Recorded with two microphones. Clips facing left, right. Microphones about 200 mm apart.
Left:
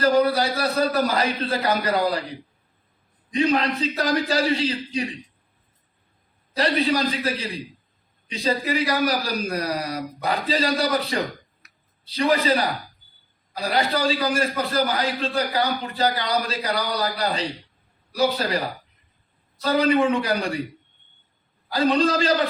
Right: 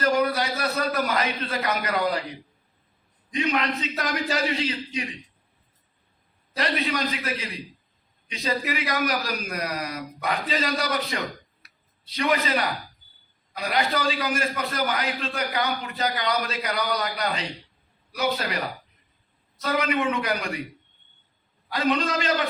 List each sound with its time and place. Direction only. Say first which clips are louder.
0.0 s a man's voice: left 4 dB; 30° left (ahead or behind)
3.3 s a man's voice: left 4 dB; 35° left (ahead or behind)
6.6 s a man's voice: left 5 dB; 30° left (ahead or behind)
21.7 s a man's voice: left 5 dB; 30° left (ahead or behind)